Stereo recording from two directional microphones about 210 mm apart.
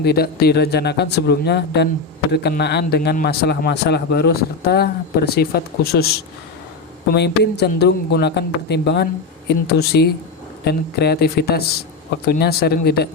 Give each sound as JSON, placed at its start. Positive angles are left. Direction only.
{"t": 0.0, "sound": "a man's voice", "side_deg": 50}
{"t": 7.1, "sound": "a man's voice", "side_deg": 50}